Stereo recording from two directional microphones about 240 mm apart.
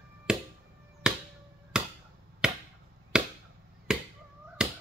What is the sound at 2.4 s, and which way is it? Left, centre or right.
Chop, centre.